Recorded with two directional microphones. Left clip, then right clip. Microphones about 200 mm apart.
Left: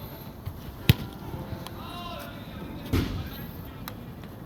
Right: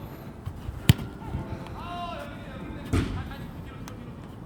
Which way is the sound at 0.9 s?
45° right (ahead or behind).